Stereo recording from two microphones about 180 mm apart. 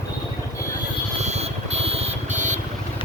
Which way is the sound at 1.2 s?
35° right (ahead or behind).